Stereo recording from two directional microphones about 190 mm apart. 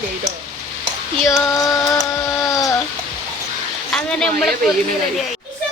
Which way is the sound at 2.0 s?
15° left (ahead or behind).